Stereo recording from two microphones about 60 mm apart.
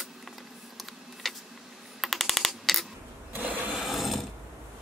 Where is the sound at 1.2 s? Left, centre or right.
Centre.